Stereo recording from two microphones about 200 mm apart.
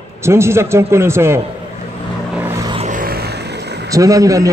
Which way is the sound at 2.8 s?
45° right (ahead or behind).